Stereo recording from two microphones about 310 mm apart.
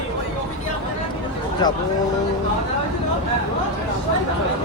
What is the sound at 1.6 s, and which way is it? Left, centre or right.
Speech, centre.